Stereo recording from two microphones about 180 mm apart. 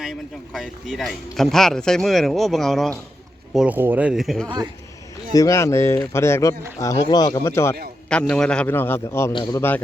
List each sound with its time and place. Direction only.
0.0 s speech: centre (ahead or behind)
4.4 s a man's voice: 25° right (ahead or behind)
5.3 s speech: 15° left (ahead or behind)
8.1 s speech: 5° left (ahead or behind)
9.3 s a man's voice: 25° left (ahead or behind)
9.6 s speech: 10° left (ahead or behind)